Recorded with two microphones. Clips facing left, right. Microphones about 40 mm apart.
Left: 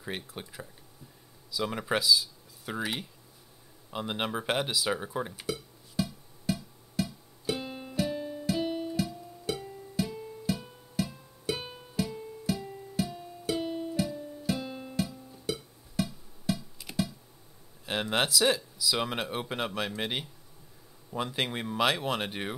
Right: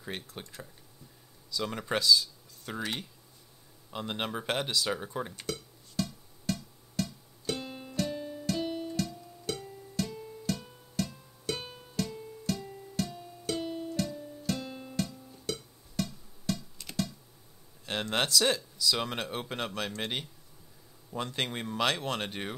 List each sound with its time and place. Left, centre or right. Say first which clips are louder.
0.0 s speech: left 2 dB; centre
3.9 s a sound: left 2 dB; centre
17.8 s speech: left 2 dB; centre